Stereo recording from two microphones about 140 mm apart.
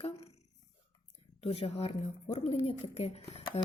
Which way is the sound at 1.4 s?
45° left (ahead or behind).